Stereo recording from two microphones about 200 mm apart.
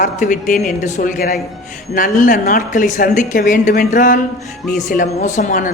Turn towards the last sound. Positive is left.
turn(degrees=40)  # may be behind; listen again after turning